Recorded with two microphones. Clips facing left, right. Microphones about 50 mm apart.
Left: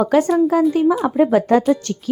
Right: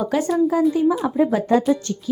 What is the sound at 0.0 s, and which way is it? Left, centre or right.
Speech, left.